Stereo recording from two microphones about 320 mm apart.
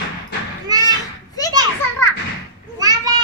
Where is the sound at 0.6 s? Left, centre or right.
Centre.